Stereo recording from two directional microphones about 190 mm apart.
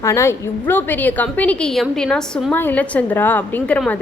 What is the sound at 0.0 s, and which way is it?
A woman's voice, 15° left (ahead or behind).